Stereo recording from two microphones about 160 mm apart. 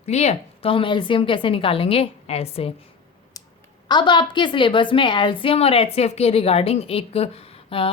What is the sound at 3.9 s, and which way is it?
A woman's voice, 30° left (ahead or behind).